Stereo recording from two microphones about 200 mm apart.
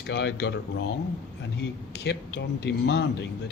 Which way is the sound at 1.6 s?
60° left (ahead or behind).